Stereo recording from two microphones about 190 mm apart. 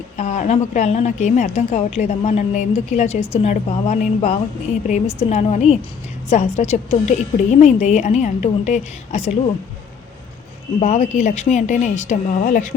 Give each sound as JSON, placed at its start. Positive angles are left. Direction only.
{"t": 0.2, "sound": "a woman's voice", "side_deg": 40}
{"t": 10.8, "sound": "a woman's voice", "side_deg": 40}